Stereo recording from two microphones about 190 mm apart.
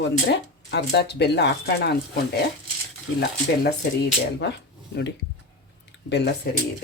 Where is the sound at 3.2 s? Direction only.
60° left (ahead or behind).